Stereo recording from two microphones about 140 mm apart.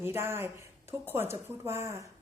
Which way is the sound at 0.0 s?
15° right (ahead or behind).